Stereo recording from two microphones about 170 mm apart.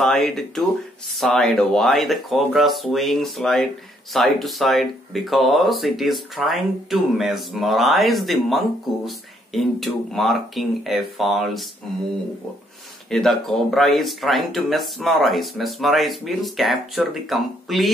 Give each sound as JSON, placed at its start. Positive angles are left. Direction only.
{"t": 0.0, "sound": "speech", "side_deg": 0}
{"t": 13.1, "sound": "speech", "side_deg": 0}